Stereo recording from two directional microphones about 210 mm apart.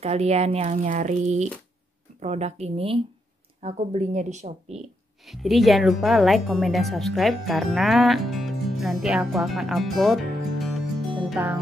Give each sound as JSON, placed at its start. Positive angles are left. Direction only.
{"t": 0.0, "sound": "speech", "side_deg": -30}
{"t": 5.2, "sound": "speech", "side_deg": 0}